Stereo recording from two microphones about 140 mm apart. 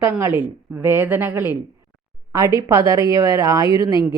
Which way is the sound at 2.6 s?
20° right (ahead or behind).